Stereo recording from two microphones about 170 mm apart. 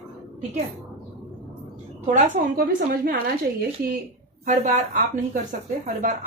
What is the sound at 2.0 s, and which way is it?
Speech, 55° right (ahead or behind).